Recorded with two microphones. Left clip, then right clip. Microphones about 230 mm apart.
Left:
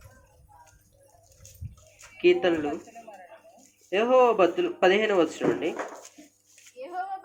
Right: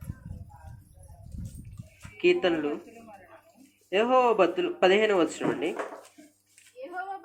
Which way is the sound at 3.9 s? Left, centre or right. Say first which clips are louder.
Left 2 dB; right.